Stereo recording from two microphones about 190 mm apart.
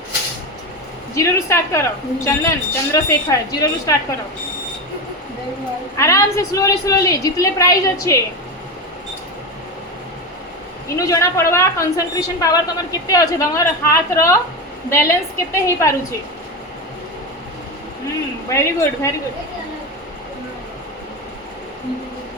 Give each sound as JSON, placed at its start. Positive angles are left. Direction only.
{"t": 1.1, "sound": "a woman's voice", "side_deg": 15}
{"t": 6.0, "sound": "a woman's voice", "side_deg": 15}
{"t": 10.9, "sound": "a woman's voice", "side_deg": 15}
{"t": 18.4, "sound": "a woman's voice", "side_deg": 15}